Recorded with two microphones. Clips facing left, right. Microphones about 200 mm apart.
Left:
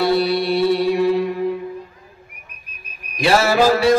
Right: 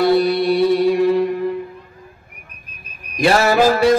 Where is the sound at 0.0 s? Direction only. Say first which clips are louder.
Right 3 dB; 50° right (ahead or behind).